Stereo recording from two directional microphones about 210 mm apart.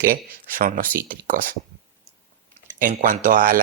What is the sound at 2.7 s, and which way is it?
Speech, 40° right (ahead or behind).